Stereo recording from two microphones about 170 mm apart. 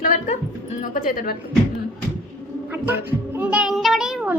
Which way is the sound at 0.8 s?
55° left (ahead or behind).